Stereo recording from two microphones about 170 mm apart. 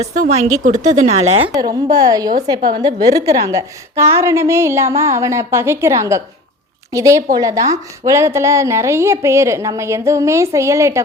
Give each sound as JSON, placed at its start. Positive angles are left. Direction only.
{"t": 0.0, "sound": "a woman's voice", "side_deg": -45}
{"t": 1.5, "sound": "a woman's voice", "side_deg": -20}